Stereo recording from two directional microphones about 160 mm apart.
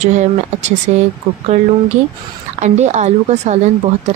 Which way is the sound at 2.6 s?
45° right (ahead or behind).